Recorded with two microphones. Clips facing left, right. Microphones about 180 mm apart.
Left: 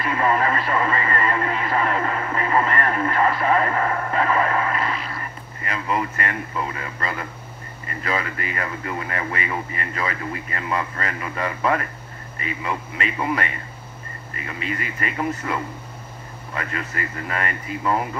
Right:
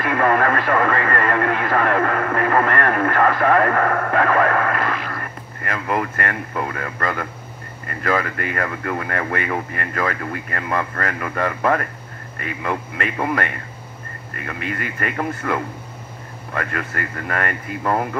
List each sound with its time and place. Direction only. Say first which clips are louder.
0.0 s speech: right 3 dB; 55° right (ahead or behind)